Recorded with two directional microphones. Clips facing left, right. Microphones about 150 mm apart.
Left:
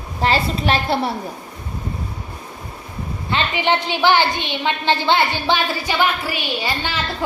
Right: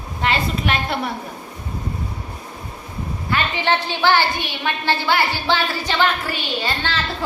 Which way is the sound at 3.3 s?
15° left (ahead or behind).